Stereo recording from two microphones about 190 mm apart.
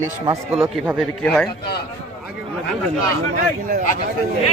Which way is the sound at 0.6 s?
5° right (ahead or behind).